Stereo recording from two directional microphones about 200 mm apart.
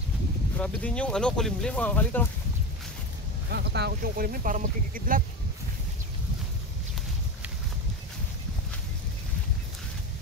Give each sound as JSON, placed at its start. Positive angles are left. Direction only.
{"t": 0.6, "sound": "speech", "side_deg": 5}
{"t": 3.4, "sound": "speech", "side_deg": -55}